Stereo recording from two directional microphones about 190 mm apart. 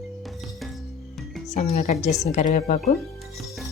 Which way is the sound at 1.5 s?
35° left (ahead or behind).